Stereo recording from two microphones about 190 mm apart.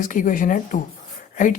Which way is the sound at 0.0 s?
45° left (ahead or behind).